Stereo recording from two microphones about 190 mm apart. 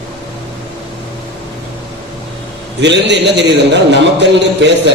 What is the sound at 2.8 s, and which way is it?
A man's voice, 65° right (ahead or behind).